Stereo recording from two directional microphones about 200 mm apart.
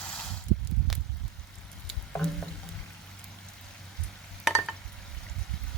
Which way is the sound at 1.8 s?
5° left (ahead or behind).